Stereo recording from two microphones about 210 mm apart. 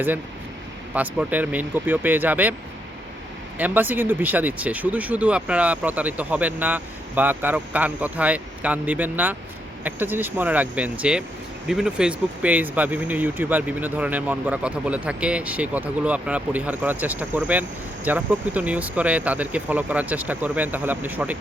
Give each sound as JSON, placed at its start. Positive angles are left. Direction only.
{"t": 0.9, "sound": "speech", "side_deg": -5}
{"t": 3.6, "sound": "speech", "side_deg": -10}